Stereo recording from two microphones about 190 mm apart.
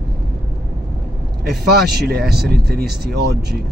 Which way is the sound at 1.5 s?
60° right (ahead or behind).